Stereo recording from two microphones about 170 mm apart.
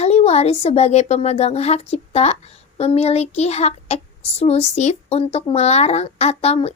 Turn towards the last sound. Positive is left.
turn(degrees=35)  # may be behind; listen again after turning